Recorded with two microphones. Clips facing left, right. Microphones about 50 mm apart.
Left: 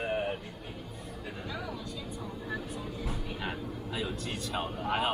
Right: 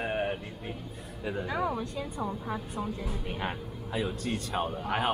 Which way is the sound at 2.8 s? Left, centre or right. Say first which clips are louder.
Right 3 dB; right.